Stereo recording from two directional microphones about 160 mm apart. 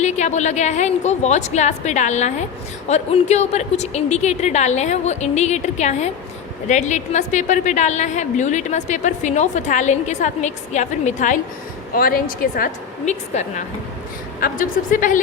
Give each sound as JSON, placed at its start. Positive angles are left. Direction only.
{"t": 0.0, "sound": "a woman's voice", "side_deg": 45}
{"t": 11.9, "sound": "a woman's voice", "side_deg": 65}
{"t": 13.1, "sound": "a woman's voice", "side_deg": 45}
{"t": 14.4, "sound": "a woman's voice", "side_deg": 55}